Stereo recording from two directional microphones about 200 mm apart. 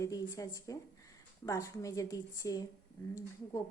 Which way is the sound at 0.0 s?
15° left (ahead or behind).